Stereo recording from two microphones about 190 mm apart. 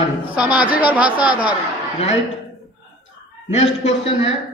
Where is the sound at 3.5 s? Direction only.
30° left (ahead or behind).